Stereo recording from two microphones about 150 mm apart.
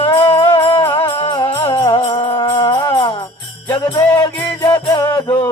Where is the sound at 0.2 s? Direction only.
30° left (ahead or behind).